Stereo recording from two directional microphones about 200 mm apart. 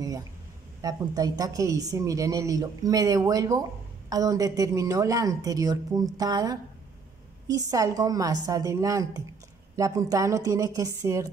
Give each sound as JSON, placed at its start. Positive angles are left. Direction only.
{"t": 0.8, "sound": "a woman's voice", "side_deg": -20}